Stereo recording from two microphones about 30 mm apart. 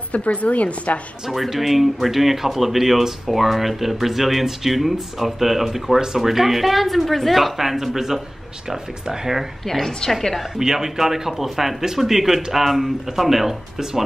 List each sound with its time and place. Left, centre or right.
0.1 s a woman's voice: left
1.6 s speech: centre
7.5 s speech: centre
9.7 s a woman's voice: centre
10.6 s speech: right
11.0 s speech: centre